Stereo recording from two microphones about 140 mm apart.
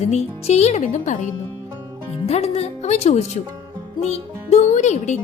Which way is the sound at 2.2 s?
50° left (ahead or behind).